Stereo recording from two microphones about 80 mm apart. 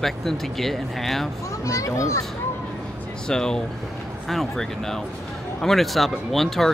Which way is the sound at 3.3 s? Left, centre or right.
Centre.